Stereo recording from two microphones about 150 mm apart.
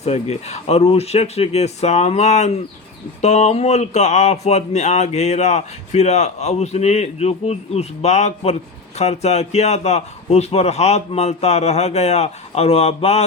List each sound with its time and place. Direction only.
0.0 s speech: 45° left (ahead or behind)